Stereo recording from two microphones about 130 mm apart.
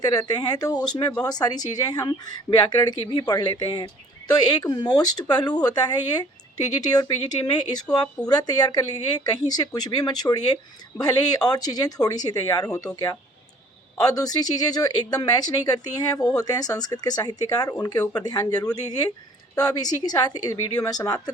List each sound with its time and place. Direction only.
0.0 s speech: 30° left (ahead or behind)